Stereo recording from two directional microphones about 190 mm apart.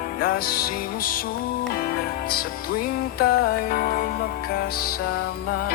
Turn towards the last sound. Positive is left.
turn(degrees=50)  # may be behind; listen again after turning